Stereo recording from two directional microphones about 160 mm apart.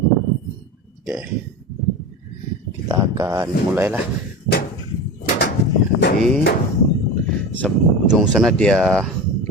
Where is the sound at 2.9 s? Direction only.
20° right (ahead or behind).